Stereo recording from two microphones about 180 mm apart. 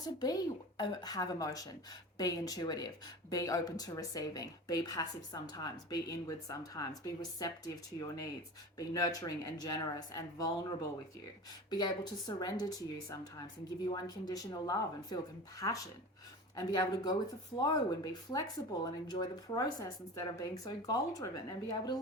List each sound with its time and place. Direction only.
0.0 s speech: 20° left (ahead or behind)
11.7 s speech: 20° left (ahead or behind)